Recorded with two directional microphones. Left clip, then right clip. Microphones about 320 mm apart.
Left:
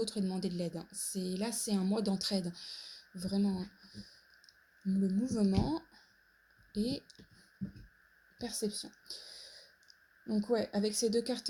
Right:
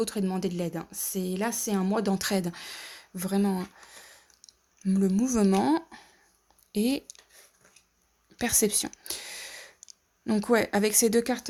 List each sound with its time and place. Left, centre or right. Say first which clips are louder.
0.0 s a woman's voice: right 7 dB; centre
4.0 s clicking: right 6 dB; right
6.7 s a woman's voice: right 9 dB; right
8.4 s a woman's voice: right 12 dB; right
9.0 s a sound: right 10 dB; right
10.5 s a woman's voice: right 9 dB; right